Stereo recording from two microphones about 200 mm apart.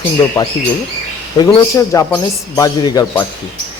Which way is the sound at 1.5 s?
15° left (ahead or behind).